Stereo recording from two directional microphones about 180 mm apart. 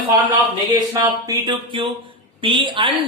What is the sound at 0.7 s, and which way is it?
Speech, 20° right (ahead or behind).